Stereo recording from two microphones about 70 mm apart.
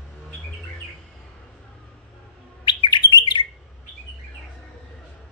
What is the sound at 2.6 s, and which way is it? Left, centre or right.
Bird, left.